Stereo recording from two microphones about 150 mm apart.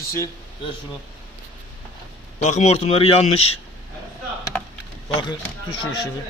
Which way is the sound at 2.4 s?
50° left (ahead or behind).